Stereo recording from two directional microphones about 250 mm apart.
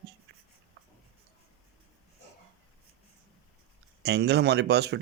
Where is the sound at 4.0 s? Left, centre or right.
Right.